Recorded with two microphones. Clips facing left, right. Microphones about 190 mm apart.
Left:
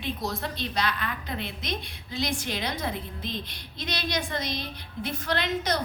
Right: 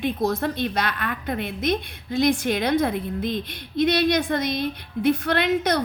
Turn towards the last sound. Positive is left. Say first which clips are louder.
# right 6 dB
turn(degrees=-55)  # may be behind; listen again after turning